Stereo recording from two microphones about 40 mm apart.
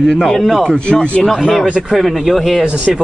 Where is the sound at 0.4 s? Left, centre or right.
Centre.